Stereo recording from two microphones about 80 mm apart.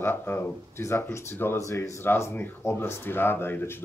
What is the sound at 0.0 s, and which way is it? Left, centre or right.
Speech, left.